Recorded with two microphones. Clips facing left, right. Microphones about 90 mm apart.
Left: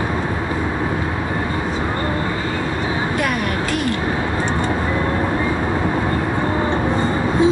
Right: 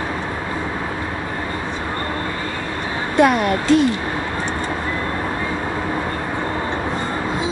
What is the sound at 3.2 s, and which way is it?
Speech, 25° right (ahead or behind).